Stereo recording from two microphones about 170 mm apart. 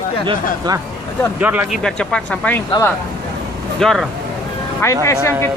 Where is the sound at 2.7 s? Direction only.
20° left (ahead or behind).